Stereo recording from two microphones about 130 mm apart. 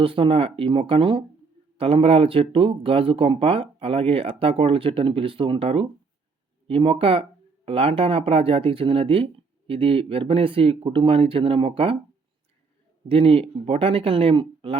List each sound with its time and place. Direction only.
0.0 s speech: 45° right (ahead or behind)
13.1 s speech: 45° right (ahead or behind)